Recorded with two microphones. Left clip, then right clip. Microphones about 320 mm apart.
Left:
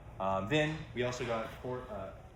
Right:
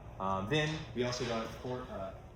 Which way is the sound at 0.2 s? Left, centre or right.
Left.